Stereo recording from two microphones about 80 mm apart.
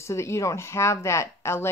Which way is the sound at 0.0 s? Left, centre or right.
Left.